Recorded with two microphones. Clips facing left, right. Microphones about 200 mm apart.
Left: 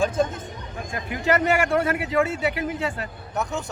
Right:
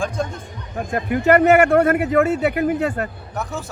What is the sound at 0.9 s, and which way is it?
Speech, 60° right (ahead or behind).